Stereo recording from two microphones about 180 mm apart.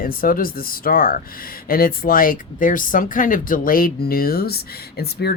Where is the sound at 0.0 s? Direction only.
50° left (ahead or behind).